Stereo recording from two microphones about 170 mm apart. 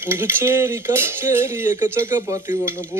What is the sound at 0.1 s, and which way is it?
Cutlery, 15° right (ahead or behind).